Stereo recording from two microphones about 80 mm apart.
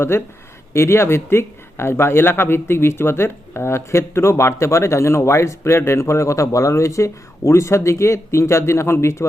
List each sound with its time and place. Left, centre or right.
0.1 s speech: left